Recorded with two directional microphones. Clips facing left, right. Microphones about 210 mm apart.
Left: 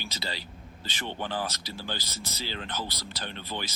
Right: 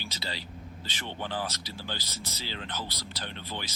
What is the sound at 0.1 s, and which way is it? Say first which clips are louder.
Speech: left 2 dB; 45° left (ahead or behind).